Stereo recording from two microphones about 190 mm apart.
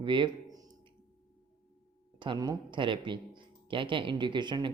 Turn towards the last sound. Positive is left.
turn(degrees=-25)  # may be behind; listen again after turning